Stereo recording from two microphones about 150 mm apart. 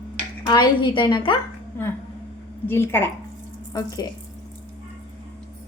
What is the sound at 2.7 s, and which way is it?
A woman's voice, 15° left (ahead or behind).